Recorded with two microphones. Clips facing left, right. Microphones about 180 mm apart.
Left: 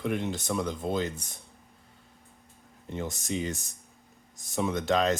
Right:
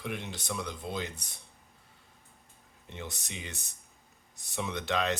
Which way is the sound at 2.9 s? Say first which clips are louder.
Left 10 dB; 45° left (ahead or behind).